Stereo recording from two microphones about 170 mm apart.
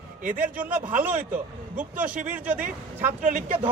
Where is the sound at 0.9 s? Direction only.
50° right (ahead or behind).